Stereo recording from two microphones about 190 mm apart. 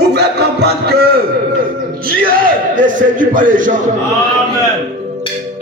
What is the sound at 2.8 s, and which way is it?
Speech, 45° right (ahead or behind).